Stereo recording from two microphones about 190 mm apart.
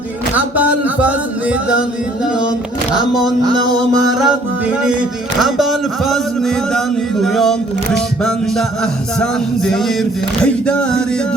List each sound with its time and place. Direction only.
2.9 s speech: centre (ahead or behind)
3.4 s music: 20° right (ahead or behind)
5.4 s speech: centre (ahead or behind)
9.6 s speech: 5° left (ahead or behind)